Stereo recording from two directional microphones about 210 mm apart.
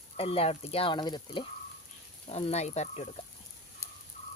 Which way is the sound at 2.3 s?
30° left (ahead or behind).